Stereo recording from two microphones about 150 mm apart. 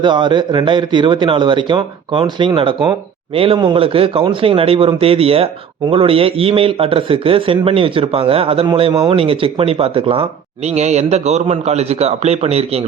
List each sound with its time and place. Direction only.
0.0 s a man's voice: 30° right (ahead or behind)